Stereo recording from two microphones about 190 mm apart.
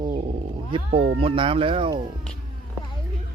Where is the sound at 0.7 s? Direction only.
30° right (ahead or behind).